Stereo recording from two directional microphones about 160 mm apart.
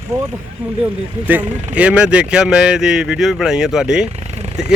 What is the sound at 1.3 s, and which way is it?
Speech, 10° right (ahead or behind).